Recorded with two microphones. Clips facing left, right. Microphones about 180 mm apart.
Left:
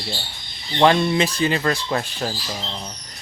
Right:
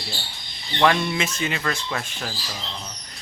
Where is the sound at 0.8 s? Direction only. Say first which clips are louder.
Left 4 dB; 30° left (ahead or behind).